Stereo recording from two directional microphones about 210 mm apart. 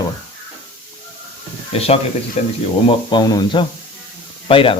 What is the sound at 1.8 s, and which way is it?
Speech, 30° left (ahead or behind).